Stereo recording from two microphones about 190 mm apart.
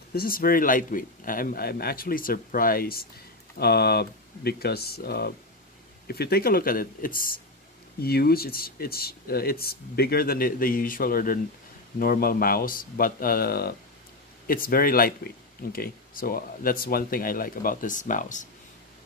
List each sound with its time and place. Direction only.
0.1 s speech: 50° left (ahead or behind)